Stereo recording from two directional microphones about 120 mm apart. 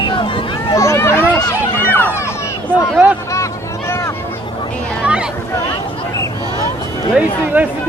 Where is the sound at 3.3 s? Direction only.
25° left (ahead or behind).